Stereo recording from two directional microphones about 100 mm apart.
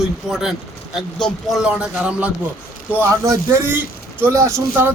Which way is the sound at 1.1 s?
5° left (ahead or behind).